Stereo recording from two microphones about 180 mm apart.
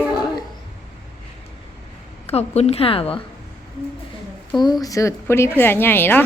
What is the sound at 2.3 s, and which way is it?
Speech, 35° left (ahead or behind).